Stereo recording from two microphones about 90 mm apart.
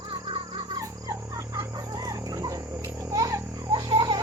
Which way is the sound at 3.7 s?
55° right (ahead or behind).